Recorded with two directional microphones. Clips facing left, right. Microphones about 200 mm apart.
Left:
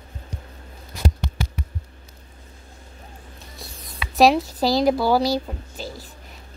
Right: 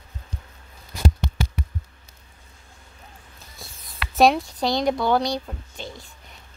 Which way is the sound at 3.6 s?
Centre (ahead or behind).